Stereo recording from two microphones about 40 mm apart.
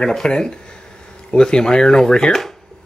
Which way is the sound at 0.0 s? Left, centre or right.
Centre.